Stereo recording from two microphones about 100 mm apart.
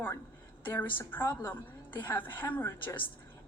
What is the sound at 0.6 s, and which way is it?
A woman's voice, 20° left (ahead or behind).